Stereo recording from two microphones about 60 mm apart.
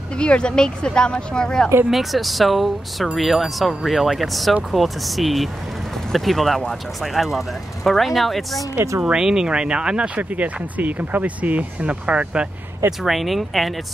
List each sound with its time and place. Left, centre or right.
0.2 s speech: centre
1.9 s speech: centre
8.7 s speech: right
9.0 s speech: centre
13.0 s speech: centre